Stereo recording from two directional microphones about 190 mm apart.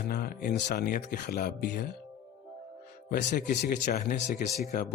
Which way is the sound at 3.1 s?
60° left (ahead or behind).